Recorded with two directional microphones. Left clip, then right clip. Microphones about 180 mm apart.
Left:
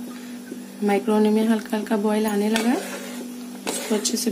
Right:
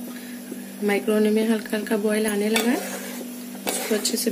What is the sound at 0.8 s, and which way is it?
Speech, 45° left (ahead or behind).